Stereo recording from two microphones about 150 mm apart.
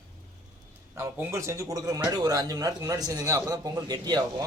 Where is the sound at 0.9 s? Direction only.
15° right (ahead or behind).